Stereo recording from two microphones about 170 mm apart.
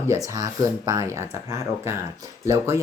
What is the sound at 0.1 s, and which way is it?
Speech, 20° right (ahead or behind).